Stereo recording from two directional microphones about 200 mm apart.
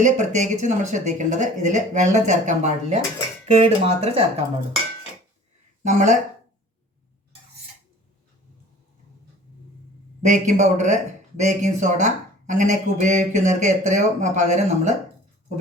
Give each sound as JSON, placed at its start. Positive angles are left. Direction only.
{"t": 0.0, "sound": "a man's voice", "side_deg": -35}
{"t": 5.8, "sound": "a man's voice", "side_deg": -35}
{"t": 10.2, "sound": "a man's voice", "side_deg": -35}